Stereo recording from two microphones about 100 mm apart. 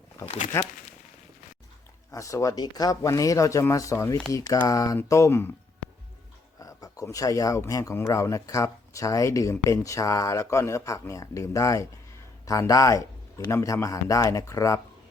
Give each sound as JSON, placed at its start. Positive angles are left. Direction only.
{"t": 0.5, "sound": "speech", "side_deg": 25}
{"t": 2.0, "sound": "speech", "side_deg": 30}
{"t": 6.6, "sound": "speech", "side_deg": 35}